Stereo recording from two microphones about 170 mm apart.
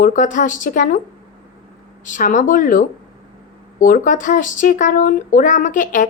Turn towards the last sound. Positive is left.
turn(degrees=50)  # may be behind; listen again after turning